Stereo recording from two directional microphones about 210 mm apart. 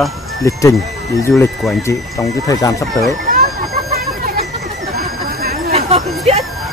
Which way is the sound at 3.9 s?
45° right (ahead or behind).